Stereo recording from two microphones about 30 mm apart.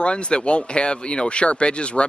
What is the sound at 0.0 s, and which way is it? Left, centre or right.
Speech, left.